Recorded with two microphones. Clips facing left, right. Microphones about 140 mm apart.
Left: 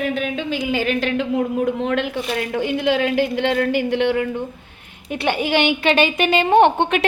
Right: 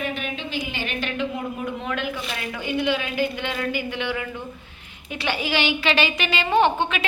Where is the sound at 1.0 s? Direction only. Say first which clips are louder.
Left 7 dB; 80° left.